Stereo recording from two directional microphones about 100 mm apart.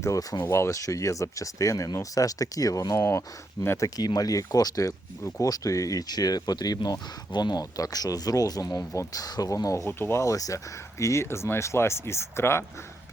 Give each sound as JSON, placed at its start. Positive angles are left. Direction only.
{"t": 0.0, "sound": "speech", "side_deg": 35}
{"t": 0.4, "sound": "speech", "side_deg": 25}
{"t": 3.8, "sound": "speech", "side_deg": 40}